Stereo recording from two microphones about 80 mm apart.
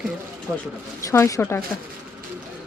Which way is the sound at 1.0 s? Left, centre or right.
Left.